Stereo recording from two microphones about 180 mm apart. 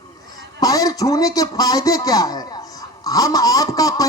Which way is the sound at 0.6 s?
20° left (ahead or behind).